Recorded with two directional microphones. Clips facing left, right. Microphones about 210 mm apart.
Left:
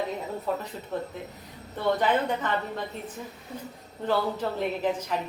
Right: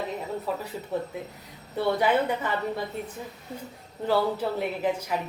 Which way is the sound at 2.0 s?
10° right (ahead or behind).